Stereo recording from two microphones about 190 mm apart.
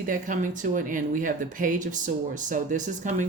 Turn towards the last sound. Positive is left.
turn(degrees=-40)  # may be behind; listen again after turning